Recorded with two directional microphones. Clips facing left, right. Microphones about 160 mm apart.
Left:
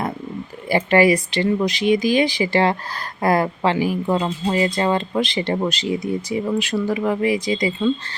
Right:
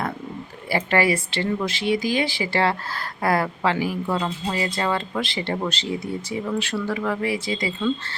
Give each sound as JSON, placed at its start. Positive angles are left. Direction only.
{"t": 0.7, "sound": "speech", "side_deg": 20}